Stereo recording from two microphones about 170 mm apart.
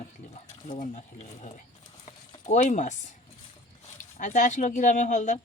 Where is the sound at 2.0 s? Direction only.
40° left (ahead or behind).